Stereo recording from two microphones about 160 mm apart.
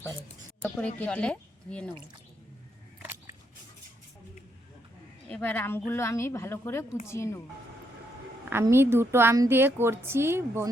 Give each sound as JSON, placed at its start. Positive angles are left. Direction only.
{"t": 0.6, "sound": "speech", "side_deg": 10}
{"t": 5.3, "sound": "speech", "side_deg": 10}
{"t": 8.6, "sound": "a woman's voice", "side_deg": -15}